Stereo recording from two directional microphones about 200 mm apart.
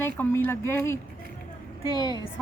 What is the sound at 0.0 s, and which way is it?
Speech, 10° left (ahead or behind).